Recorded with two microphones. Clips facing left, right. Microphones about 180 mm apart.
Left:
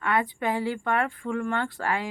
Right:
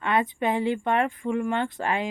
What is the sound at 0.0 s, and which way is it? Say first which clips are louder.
Speech: right 2 dB; 20° right (ahead or behind).